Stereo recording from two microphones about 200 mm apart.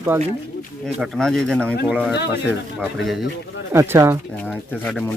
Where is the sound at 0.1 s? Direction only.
10° right (ahead or behind).